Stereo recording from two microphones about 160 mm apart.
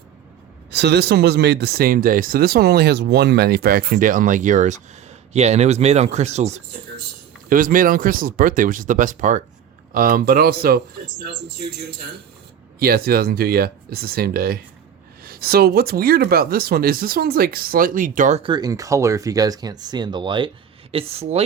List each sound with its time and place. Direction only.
0.7 s speech: 90° right; by 6.6 s 45° right (ahead or behind)
7.5 s speech: 60° right (ahead or behind)
9.9 s speech: 65° right (ahead or behind)
12.8 s speech: 70° right (ahead or behind)
18.3 s speech: 30° right (ahead or behind)